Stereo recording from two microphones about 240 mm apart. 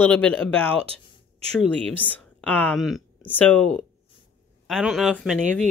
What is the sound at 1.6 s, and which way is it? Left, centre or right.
Speech, centre.